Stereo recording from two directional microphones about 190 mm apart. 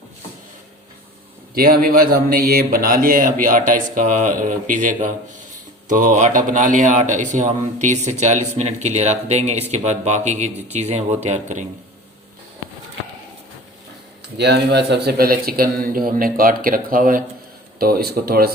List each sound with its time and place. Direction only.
1.5 s a man's voice: 50° right (ahead or behind)
14.3 s a man's voice: 60° right (ahead or behind)